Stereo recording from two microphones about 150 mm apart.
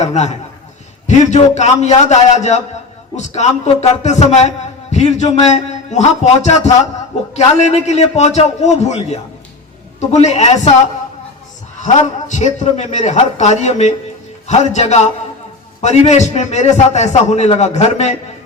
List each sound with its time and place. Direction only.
0.0 s a man's voice: 50° left (ahead or behind)
11.8 s a man's voice: 55° left (ahead or behind)